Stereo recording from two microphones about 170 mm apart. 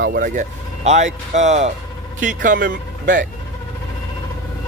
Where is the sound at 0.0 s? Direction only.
60° right (ahead or behind).